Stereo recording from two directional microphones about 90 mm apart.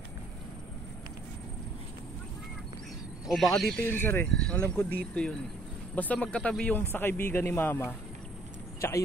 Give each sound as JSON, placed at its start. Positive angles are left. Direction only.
{"t": 3.3, "sound": "speech", "side_deg": 0}
{"t": 3.8, "sound": "a man's voice", "side_deg": 25}
{"t": 4.3, "sound": "a man's voice", "side_deg": 10}